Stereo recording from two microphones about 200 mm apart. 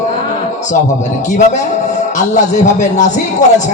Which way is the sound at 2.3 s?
35° left (ahead or behind).